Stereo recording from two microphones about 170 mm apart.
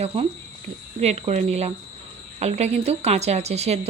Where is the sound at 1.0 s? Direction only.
40° right (ahead or behind).